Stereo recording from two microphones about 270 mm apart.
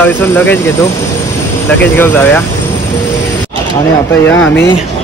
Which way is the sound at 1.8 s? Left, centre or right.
Centre.